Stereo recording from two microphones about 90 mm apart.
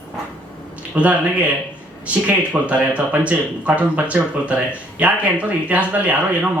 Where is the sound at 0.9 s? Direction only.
15° right (ahead or behind).